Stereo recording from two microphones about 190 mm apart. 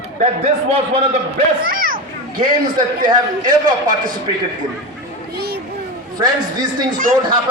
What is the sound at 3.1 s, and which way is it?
Speech, 25° right (ahead or behind).